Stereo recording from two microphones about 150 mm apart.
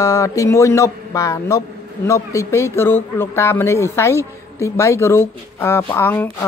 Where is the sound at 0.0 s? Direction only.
20° left (ahead or behind).